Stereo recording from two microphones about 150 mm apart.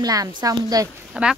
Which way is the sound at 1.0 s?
5° right (ahead or behind).